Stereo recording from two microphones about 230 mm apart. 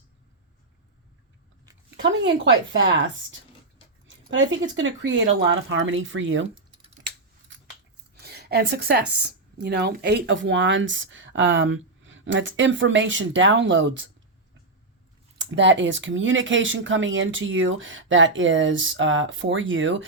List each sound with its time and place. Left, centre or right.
2.0 s speech: right
4.2 s speech: right
8.1 s a sound: right
9.6 s speech: right
15.4 s speech: right